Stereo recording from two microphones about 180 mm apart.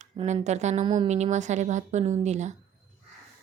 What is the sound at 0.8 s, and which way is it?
Speech, 25° right (ahead or behind).